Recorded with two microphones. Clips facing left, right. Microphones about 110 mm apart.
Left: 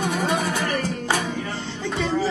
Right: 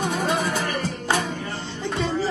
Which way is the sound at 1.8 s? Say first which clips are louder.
Even; 20° right (ahead or behind).